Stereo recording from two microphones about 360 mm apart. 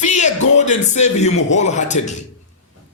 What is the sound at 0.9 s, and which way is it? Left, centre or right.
Speech, centre.